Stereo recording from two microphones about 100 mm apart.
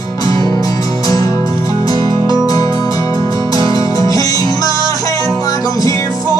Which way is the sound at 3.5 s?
35° left (ahead or behind).